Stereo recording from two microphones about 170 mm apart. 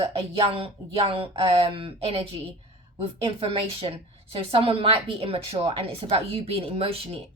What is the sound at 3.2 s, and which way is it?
A woman's voice, 35° right (ahead or behind).